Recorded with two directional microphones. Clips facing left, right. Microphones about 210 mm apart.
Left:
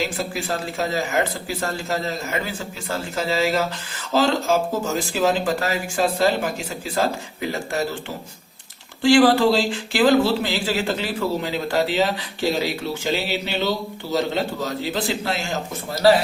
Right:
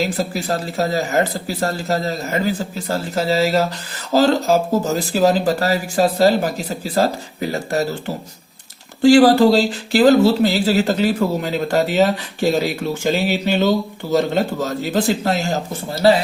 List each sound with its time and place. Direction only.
0.0 s speech: 40° right (ahead or behind)